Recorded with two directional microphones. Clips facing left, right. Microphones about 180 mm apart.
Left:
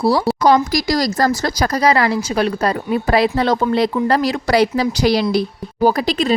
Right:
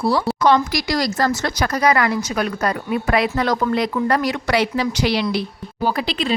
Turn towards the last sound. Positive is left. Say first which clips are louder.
# left 6 dB
turn(degrees=40)  # may be behind; listen again after turning